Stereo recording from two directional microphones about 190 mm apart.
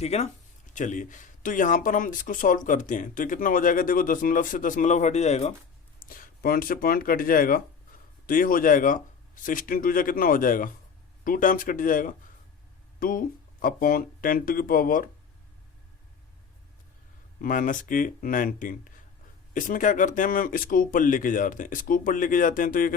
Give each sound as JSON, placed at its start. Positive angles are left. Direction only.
{"t": 0.0, "sound": "speech", "side_deg": 35}
{"t": 6.1, "sound": "speech", "side_deg": 50}
{"t": 17.4, "sound": "speech", "side_deg": 45}